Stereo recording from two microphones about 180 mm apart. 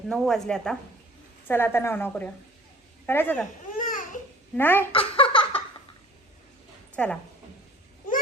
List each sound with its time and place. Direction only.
0.1 s a woman's voice: centre (ahead or behind)
3.7 s babbling: 45° left (ahead or behind)
4.5 s a woman's voice: 10° left (ahead or behind)
4.9 s a sound: 30° left (ahead or behind)
6.9 s a woman's voice: 5° left (ahead or behind)